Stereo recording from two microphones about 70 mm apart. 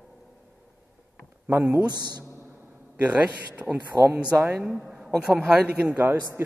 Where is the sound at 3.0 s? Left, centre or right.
Centre.